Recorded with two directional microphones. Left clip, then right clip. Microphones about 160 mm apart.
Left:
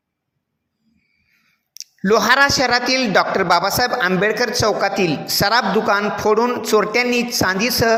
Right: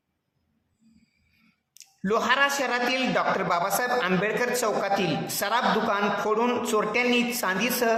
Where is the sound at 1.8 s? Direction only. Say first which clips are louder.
Left 10 dB; 35° left (ahead or behind).